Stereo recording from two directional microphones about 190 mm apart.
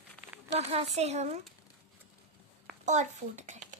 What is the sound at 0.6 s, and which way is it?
Speech, 35° right (ahead or behind).